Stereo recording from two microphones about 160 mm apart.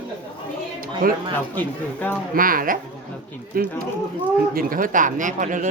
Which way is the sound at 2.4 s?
60° right (ahead or behind).